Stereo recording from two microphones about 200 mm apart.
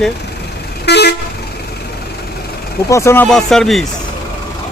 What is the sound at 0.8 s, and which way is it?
Vehicle, 55° left (ahead or behind).